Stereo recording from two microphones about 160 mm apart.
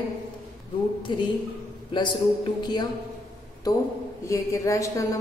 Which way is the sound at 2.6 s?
25° left (ahead or behind).